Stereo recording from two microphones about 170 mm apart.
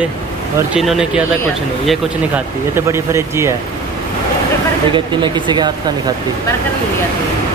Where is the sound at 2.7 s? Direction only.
15° right (ahead or behind).